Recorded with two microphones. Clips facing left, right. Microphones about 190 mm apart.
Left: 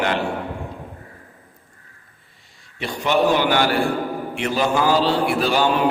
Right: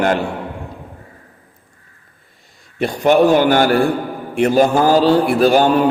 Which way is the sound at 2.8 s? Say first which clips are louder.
Right 7 dB; 50° right (ahead or behind).